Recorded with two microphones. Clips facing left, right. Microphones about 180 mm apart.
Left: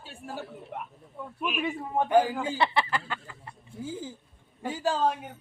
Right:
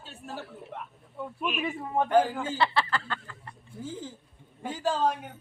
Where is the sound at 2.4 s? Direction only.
15° left (ahead or behind).